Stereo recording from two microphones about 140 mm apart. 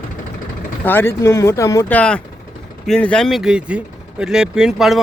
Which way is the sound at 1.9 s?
10° left (ahead or behind).